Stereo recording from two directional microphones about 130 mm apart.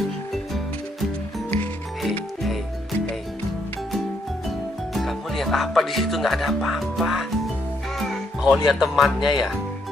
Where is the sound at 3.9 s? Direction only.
Centre (ahead or behind).